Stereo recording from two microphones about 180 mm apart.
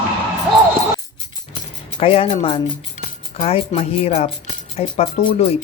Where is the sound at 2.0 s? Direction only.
35° left (ahead or behind).